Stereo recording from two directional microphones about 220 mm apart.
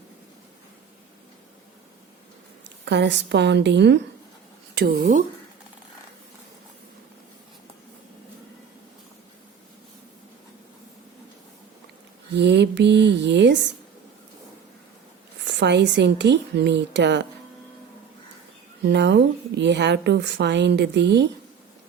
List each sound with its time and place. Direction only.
2.6 s a woman's voice: 50° right (ahead or behind)
12.4 s a woman's voice: 50° right (ahead or behind)
15.4 s a woman's voice: 50° right (ahead or behind)
18.8 s a woman's voice: 50° right (ahead or behind)